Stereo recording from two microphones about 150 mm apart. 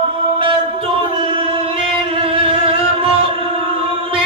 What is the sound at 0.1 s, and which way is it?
Music, 35° right (ahead or behind).